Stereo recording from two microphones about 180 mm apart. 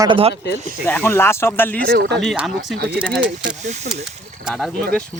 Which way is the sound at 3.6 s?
40° right (ahead or behind).